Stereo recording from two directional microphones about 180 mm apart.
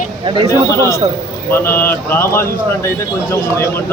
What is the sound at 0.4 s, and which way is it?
Speech, 15° left (ahead or behind).